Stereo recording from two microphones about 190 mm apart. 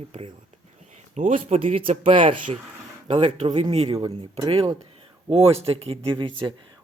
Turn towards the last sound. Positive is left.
turn(degrees=-25)  # may be behind; listen again after turning